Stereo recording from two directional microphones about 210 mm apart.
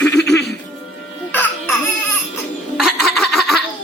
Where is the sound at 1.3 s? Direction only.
10° left (ahead or behind).